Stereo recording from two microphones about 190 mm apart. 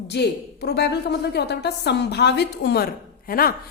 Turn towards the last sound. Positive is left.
turn(degrees=50)  # may be behind; listen again after turning